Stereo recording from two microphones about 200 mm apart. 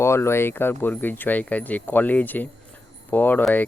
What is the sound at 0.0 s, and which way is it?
Speech, 15° left (ahead or behind).